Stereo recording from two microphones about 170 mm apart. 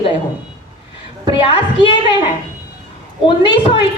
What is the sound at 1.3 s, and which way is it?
Speech, 30° left (ahead or behind).